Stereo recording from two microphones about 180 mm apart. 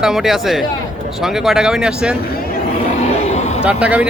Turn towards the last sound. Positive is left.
turn(degrees=-5)  # may be behind; listen again after turning